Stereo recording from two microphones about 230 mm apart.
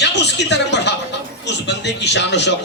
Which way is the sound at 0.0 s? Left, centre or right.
Left.